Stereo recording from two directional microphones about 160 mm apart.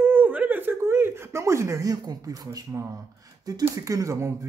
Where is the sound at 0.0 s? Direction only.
10° right (ahead or behind).